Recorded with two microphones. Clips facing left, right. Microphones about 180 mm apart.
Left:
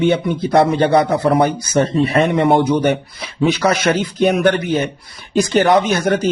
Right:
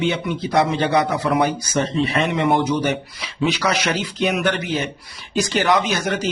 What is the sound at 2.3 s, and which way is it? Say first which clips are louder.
Speech: left 3 dB; 40° left (ahead or behind).